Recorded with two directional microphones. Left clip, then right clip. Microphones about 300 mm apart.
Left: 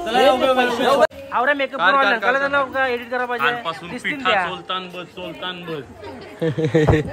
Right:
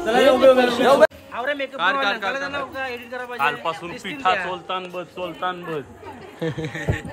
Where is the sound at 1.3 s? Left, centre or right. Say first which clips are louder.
Left 7 dB; left.